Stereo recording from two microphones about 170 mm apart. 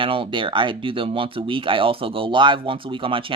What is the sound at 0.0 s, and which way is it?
Speech, 30° right (ahead or behind).